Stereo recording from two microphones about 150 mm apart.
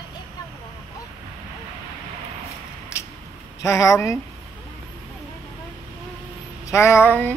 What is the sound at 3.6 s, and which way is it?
Speech, 20° left (ahead or behind).